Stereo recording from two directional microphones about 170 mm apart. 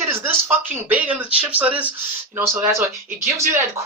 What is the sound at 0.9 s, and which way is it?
Speech, 10° right (ahead or behind).